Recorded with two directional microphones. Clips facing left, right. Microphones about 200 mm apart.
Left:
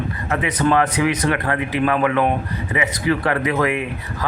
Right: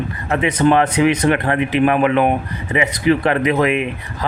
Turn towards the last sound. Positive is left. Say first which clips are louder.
# right 3 dB
turn(degrees=-20)  # may be behind; listen again after turning